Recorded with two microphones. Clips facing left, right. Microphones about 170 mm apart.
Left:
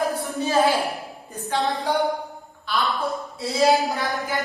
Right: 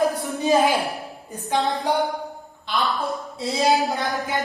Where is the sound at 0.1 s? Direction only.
20° right (ahead or behind).